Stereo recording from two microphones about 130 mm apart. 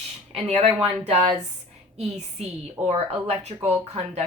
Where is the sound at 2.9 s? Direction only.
50° right (ahead or behind).